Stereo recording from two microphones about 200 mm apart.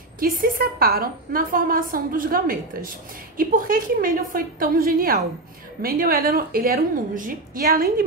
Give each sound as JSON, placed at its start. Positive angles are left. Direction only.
{"t": 0.2, "sound": "a woman's voice", "side_deg": -45}